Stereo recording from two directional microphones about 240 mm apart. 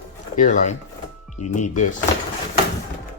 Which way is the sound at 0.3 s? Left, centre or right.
Left.